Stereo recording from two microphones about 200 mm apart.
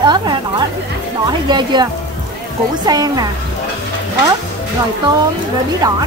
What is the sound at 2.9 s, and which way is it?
Speech, 20° right (ahead or behind).